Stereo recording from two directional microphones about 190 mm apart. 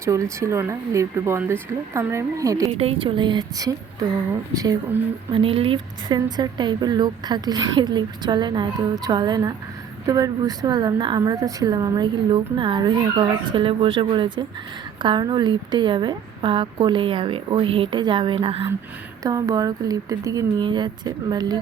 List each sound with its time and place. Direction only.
0.0 s speech: 15° right (ahead or behind)
2.7 s speech: 30° right (ahead or behind)